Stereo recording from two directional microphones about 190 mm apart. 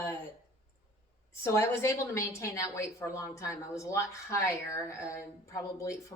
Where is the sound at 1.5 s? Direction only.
15° left (ahead or behind).